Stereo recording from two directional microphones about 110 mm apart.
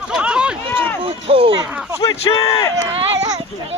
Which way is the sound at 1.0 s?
55° right (ahead or behind).